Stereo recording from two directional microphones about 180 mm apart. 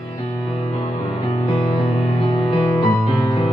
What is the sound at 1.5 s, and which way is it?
Music, 25° left (ahead or behind).